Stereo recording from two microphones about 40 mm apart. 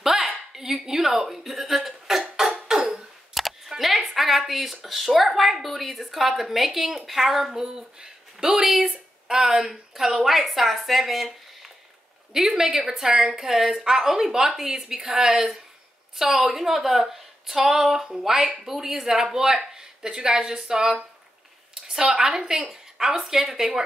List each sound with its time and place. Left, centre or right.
0.0 s a sound: centre
0.6 s speech: centre
2.5 s cough: centre
3.3 s a sound: centre
3.8 s a woman's voice: centre
12.3 s speech: centre
22.6 s speech: centre